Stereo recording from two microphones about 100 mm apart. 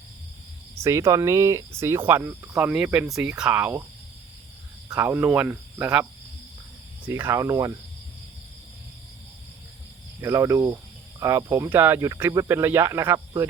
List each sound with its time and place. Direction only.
0.8 s speech: 30° right (ahead or behind)
2.6 s speech: 10° right (ahead or behind)
4.9 s speech: 20° right (ahead or behind)
7.1 s speech: 25° right (ahead or behind)
10.2 s speech: 30° right (ahead or behind)
13.1 s speech: 35° right (ahead or behind)